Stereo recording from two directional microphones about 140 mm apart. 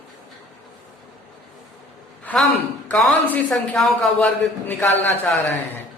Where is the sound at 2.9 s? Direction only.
10° left (ahead or behind).